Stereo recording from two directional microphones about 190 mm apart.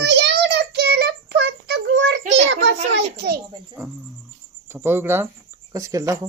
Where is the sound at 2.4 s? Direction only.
80° right.